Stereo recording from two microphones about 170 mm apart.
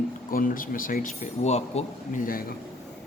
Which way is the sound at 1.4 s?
40° left (ahead or behind).